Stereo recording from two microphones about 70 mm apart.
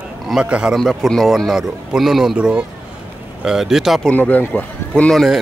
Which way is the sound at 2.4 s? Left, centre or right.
Centre.